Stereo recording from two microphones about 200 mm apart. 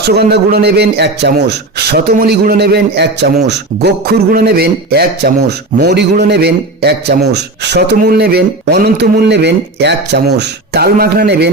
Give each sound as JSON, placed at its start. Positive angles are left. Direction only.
{"t": 0.0, "sound": "speech", "side_deg": -55}